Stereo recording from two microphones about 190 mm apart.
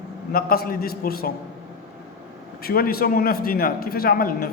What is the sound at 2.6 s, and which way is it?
A man's voice, 50° left (ahead or behind).